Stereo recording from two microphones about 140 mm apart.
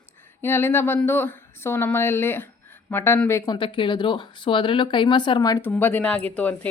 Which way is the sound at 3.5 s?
40° left (ahead or behind).